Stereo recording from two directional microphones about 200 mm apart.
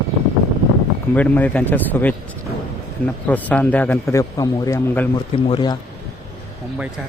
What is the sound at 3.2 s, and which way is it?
A man's voice, 10° left (ahead or behind).